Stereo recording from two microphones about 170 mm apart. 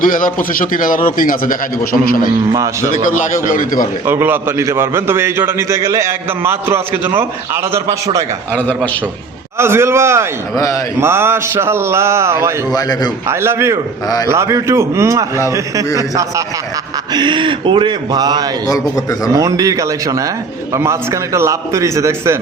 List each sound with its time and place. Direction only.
0.0 s speech: 55° left (ahead or behind)
4.0 s a man's voice: 15° right (ahead or behind)
8.5 s a man's voice: 10° left (ahead or behind)
9.6 s a man's voice: 15° right (ahead or behind)
12.7 s a man's voice: 25° left (ahead or behind)
13.2 s a man's voice: 15° right (ahead or behind)
18.7 s a man's voice: 20° left (ahead or behind)
19.3 s a man's voice: 20° right (ahead or behind)